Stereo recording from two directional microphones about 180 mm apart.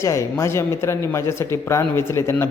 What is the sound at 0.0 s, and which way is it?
A woman's voice, 15° left (ahead or behind).